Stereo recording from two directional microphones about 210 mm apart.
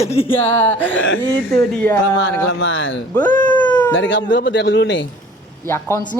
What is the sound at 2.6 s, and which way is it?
Speech, 65° left (ahead or behind).